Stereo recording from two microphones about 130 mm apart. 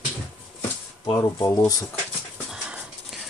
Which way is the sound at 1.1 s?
25° left (ahead or behind).